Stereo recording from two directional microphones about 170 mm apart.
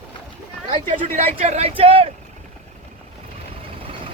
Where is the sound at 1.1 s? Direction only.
40° right (ahead or behind).